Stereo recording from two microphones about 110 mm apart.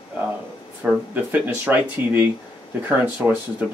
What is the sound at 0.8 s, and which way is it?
Speech, 15° right (ahead or behind).